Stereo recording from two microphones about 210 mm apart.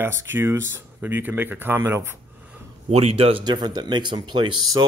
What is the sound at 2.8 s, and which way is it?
Speech, 30° right (ahead or behind).